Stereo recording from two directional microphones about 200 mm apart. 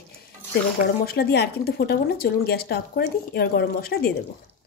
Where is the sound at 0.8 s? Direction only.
50° left (ahead or behind).